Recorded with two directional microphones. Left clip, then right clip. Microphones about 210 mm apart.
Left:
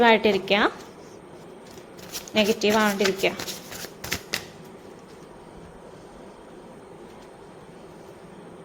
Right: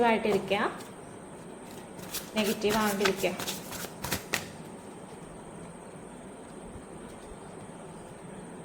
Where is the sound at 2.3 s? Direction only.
55° left (ahead or behind).